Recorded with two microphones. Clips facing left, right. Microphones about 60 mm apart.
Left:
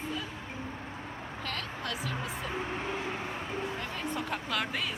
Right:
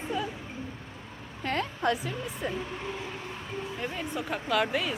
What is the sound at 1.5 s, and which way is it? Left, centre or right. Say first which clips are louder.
Speech: right 10 dB; right.